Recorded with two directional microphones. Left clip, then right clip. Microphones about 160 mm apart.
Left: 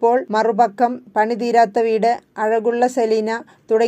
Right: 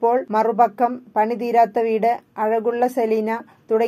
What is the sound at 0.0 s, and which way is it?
Speech, 25° left (ahead or behind).